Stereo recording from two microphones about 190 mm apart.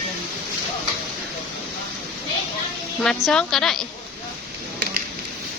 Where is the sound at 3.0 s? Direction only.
5° left (ahead or behind).